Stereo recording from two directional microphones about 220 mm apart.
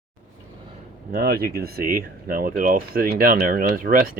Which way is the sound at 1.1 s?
45° right (ahead or behind).